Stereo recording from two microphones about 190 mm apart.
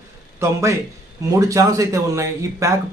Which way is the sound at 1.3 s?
15° right (ahead or behind).